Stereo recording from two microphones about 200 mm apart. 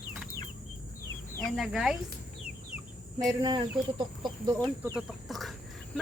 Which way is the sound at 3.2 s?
20° right (ahead or behind).